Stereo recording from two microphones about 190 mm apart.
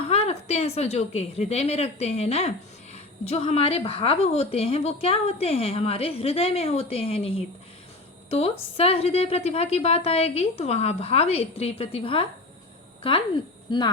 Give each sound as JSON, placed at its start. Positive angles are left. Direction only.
{"t": 0.1, "sound": "a woman's voice", "side_deg": 35}